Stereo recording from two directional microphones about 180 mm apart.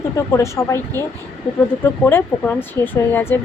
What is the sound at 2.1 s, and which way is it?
Speech, 10° left (ahead or behind).